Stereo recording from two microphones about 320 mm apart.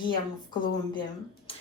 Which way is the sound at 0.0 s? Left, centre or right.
Centre.